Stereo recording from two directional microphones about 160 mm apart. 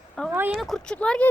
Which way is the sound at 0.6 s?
5° left (ahead or behind).